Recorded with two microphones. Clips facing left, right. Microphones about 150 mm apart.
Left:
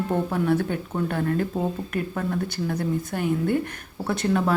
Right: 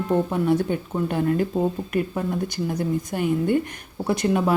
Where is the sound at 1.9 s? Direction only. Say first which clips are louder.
Right 3 dB; 15° right (ahead or behind).